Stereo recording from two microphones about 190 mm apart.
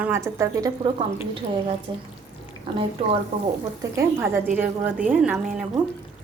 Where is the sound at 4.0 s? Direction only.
15° right (ahead or behind).